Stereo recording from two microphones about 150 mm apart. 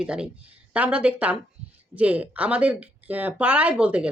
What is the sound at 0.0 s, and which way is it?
Speech, 5° right (ahead or behind).